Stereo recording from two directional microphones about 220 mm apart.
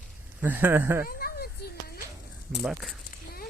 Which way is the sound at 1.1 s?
45° left (ahead or behind).